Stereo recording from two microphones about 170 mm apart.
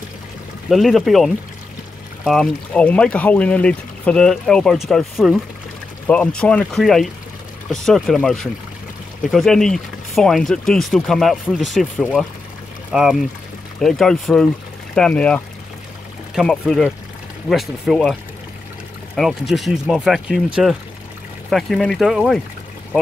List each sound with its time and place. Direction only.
0.7 s speech: centre (ahead or behind)
6.0 s speech: 10° left (ahead or behind)
19.1 s speech: centre (ahead or behind)